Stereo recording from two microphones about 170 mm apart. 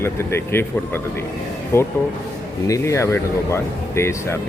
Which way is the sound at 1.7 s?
15° left (ahead or behind).